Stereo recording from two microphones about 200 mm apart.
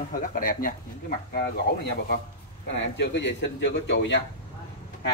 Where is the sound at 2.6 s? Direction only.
60° left (ahead or behind).